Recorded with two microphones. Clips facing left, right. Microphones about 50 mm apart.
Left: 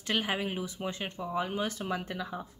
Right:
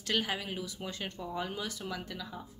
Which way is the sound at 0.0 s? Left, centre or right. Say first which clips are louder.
Left 2 dB; left.